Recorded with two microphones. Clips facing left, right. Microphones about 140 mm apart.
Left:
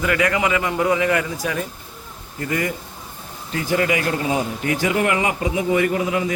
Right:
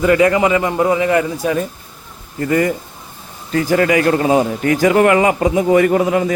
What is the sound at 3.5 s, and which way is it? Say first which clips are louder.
A man's voice: right 7 dB; 60° right (ahead or behind).